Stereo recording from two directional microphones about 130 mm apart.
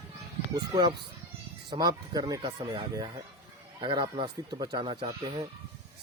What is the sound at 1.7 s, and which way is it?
Speech, 35° right (ahead or behind).